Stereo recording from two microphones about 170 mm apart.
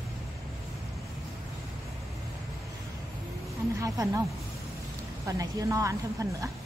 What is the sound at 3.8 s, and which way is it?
Speech, 20° right (ahead or behind).